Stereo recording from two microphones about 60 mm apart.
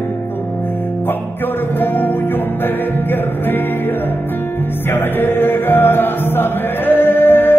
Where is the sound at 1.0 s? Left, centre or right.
Left.